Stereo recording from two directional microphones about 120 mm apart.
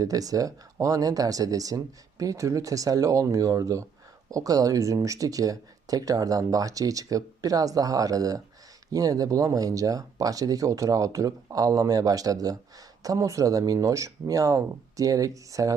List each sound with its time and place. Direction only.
0.0 s speech: 30° right (ahead or behind)